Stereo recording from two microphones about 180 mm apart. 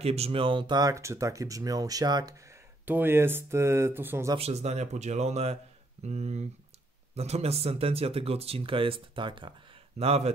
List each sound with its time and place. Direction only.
0.0 s speech: 35° right (ahead or behind)
2.8 s speech: 10° right (ahead or behind)
4.4 s speech: 35° right (ahead or behind)